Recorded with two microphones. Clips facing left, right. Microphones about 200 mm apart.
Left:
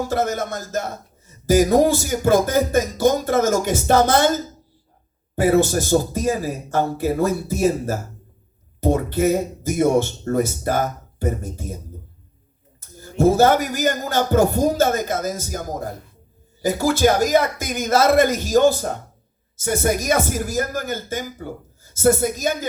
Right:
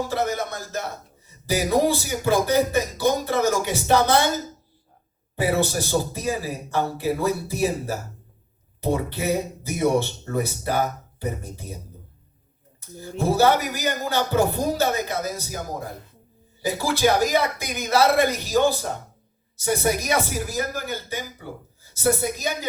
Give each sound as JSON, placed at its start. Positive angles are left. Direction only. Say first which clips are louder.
{"t": 0.1, "sound": "music", "louder": "left 3 dB", "side_deg": 45}
{"t": 5.4, "sound": "music", "louder": "left 6 dB", "side_deg": 45}
{"t": 13.0, "sound": "music", "louder": "left 5 dB", "side_deg": 45}
{"t": 16.6, "sound": "music", "louder": "left 4 dB", "side_deg": 45}